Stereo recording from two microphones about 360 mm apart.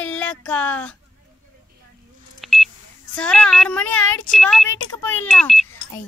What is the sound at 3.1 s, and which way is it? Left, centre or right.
A woman's voice, centre.